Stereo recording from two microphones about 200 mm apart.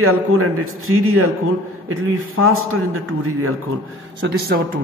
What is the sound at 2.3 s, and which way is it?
A man's voice, 90° right.